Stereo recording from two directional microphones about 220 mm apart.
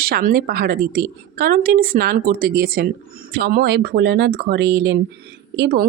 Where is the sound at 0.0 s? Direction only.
40° right (ahead or behind).